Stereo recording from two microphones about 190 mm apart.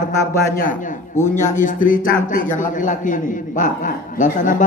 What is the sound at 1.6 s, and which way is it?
A man's voice, 45° left (ahead or behind).